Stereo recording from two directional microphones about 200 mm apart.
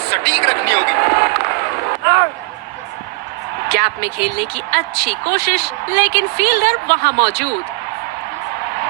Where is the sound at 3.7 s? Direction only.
50° right (ahead or behind).